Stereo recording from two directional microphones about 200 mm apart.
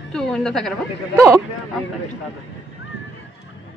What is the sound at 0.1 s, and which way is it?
Speech, 5° left (ahead or behind).